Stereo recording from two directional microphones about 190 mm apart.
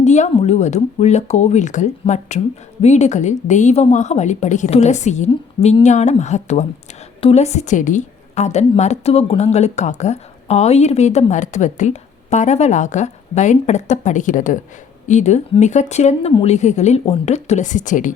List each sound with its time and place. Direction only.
0.0 s a woman's voice: 35° left (ahead or behind)